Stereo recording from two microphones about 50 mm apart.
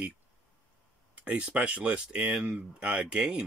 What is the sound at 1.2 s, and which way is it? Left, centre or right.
Speech, right.